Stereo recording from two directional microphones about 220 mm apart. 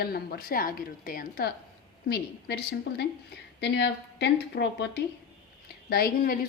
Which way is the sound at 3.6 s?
50° left (ahead or behind).